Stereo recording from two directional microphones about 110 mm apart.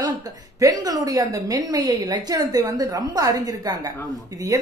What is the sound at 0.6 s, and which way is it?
A woman's voice, 35° right (ahead or behind).